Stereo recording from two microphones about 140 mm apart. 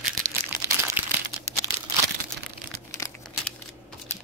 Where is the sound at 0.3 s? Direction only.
15° right (ahead or behind).